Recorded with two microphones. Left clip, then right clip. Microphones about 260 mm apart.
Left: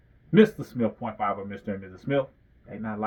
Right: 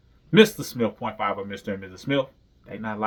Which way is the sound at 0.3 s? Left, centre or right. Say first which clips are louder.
Right 3 dB; centre.